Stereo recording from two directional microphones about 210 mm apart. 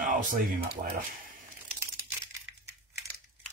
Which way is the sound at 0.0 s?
40° right (ahead or behind).